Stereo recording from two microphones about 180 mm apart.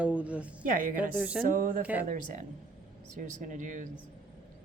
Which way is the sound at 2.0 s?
45° right (ahead or behind).